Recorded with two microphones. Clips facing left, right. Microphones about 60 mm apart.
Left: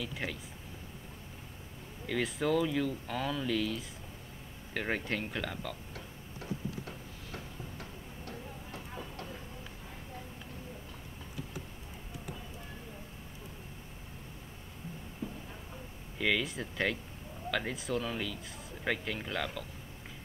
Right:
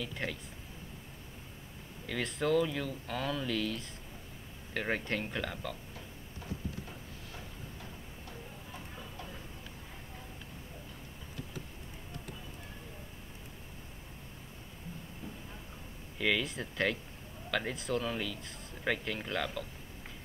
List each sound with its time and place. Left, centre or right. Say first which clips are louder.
0.0 s speech: even; centre
2.0 s speech: left 1 dB; centre
8.3 s music: left 3 dB; left
16.2 s speech: even; centre